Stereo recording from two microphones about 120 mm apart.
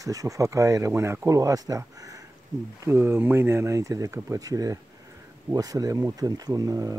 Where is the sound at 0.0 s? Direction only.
30° right (ahead or behind).